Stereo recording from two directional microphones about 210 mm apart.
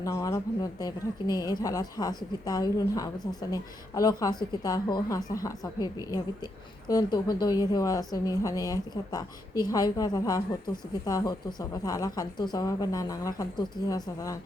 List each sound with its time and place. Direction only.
0.0 s a woman's voice: 15° left (ahead or behind)